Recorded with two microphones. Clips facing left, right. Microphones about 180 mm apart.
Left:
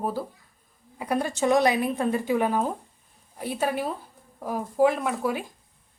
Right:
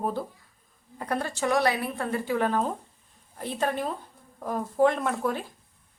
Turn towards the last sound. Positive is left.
turn(degrees=10)  # may be behind; listen again after turning